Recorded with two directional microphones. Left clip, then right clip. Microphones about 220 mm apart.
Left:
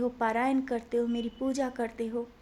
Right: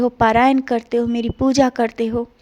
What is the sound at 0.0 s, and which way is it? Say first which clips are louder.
A woman's voice: right 14 dB; 40° right (ahead or behind).